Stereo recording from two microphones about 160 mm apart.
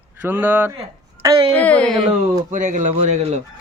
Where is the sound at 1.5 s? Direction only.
10° left (ahead or behind).